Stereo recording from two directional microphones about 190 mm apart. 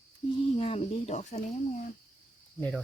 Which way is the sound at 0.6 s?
30° left (ahead or behind).